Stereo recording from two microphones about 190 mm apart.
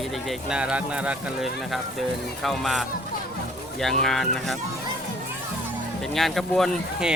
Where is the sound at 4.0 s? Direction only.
Centre (ahead or behind).